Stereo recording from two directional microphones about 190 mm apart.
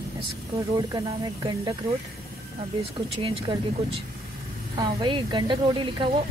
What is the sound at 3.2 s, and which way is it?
A woman's voice, 30° right (ahead or behind).